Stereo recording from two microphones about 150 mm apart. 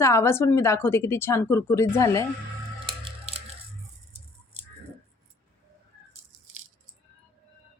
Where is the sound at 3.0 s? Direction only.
45° right (ahead or behind).